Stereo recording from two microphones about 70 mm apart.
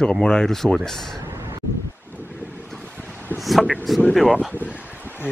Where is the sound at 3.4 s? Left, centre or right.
Centre.